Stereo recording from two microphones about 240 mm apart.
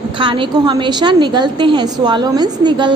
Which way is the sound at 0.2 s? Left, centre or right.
Centre.